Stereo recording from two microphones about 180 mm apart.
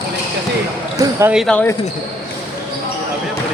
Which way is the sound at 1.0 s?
15° right (ahead or behind).